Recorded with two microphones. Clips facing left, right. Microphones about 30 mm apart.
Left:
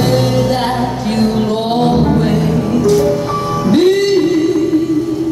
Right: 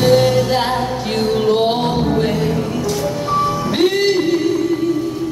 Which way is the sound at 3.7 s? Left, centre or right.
Centre.